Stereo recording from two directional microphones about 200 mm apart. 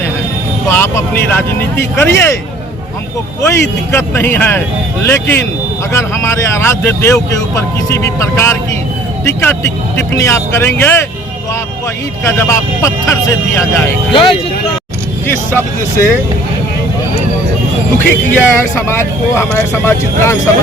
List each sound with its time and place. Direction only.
0.7 s speech: 10° left (ahead or behind)
3.4 s speech: 10° left (ahead or behind)
12.2 s speech: 15° left (ahead or behind)
14.1 s speech: 25° left (ahead or behind)
17.9 s speech: 10° left (ahead or behind)